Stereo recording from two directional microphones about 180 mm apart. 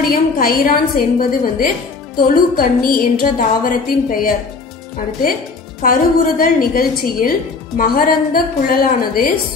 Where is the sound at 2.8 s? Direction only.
55° left (ahead or behind).